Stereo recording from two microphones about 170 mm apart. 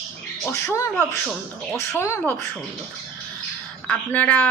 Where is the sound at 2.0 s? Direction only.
15° left (ahead or behind).